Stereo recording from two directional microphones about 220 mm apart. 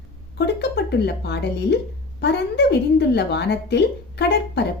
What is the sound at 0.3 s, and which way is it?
A woman's voice, 50° left (ahead or behind).